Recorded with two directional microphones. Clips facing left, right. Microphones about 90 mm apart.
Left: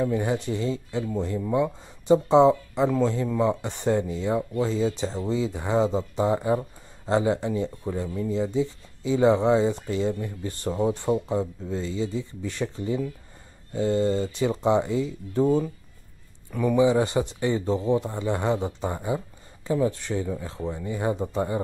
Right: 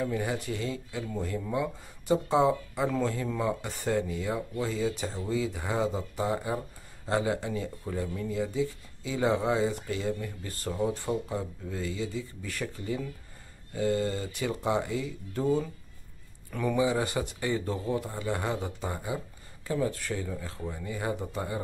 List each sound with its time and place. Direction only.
0.0 s speech: 25° left (ahead or behind)
16.7 s speech: 25° left (ahead or behind)